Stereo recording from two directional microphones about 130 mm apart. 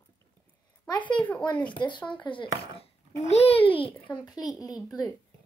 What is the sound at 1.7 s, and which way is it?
Speech, 35° left (ahead or behind).